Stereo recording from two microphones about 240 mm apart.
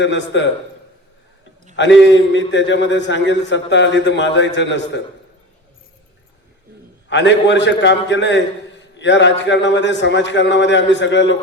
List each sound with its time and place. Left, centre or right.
0.0 s a man's voice: left
1.7 s a man's voice: left
7.1 s a man's voice: left